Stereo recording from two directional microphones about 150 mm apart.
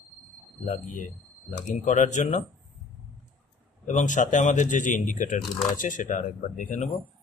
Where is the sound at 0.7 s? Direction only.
60° left (ahead or behind).